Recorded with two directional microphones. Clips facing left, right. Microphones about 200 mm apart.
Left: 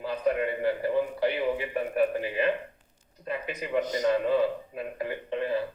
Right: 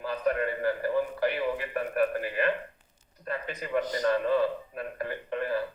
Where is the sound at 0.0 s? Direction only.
15° left (ahead or behind).